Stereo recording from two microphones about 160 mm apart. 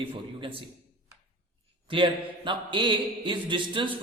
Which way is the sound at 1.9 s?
30° right (ahead or behind).